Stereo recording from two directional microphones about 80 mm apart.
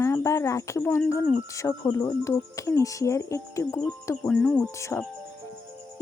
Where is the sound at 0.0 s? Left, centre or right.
Left.